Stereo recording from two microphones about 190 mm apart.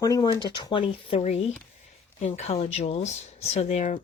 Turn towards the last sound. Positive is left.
turn(degrees=40)  # may be behind; listen again after turning